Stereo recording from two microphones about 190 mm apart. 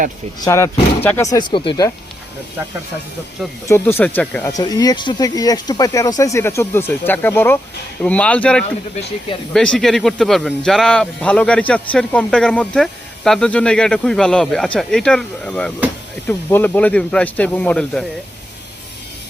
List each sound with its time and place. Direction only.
0.4 s speech: 15° left (ahead or behind)
3.7 s speech: 10° left (ahead or behind)
4.5 s speech: 20° left (ahead or behind)